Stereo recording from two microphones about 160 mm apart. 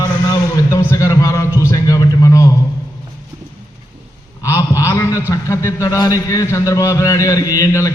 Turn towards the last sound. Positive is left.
turn(degrees=20)  # may be behind; listen again after turning